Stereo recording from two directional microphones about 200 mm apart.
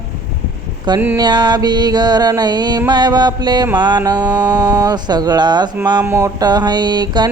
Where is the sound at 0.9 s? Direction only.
15° right (ahead or behind).